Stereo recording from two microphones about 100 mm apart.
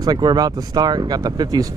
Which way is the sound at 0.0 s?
45° right (ahead or behind).